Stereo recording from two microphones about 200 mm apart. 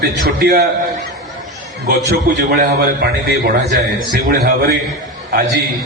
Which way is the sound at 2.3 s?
50° right (ahead or behind).